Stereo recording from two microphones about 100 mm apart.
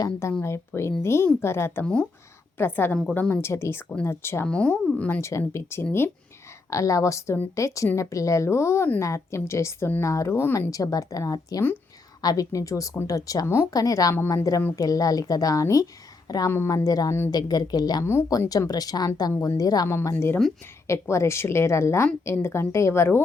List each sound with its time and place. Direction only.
0.0 s a woman's voice: 30° left (ahead or behind)
1.8 s speech: 10° left (ahead or behind)
2.6 s a woman's voice: 20° left (ahead or behind)
4.4 s speech: 10° left (ahead or behind)
5.2 s a woman's voice: 30° left (ahead or behind)
10.7 s a woman's voice: 35° left (ahead or behind)
16.5 s a woman's voice: 25° left (ahead or behind)
16.7 s a woman's voice: 40° left (ahead or behind)
18.0 s a woman's voice: 25° left (ahead or behind)
18.3 s a woman's voice: 40° left (ahead or behind)
20.1 s a woman's voice: 25° left (ahead or behind)